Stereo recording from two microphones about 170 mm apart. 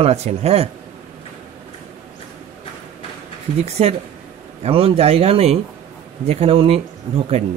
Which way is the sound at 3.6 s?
40° right (ahead or behind).